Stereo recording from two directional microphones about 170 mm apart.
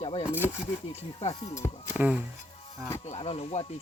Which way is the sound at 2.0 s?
10° right (ahead or behind).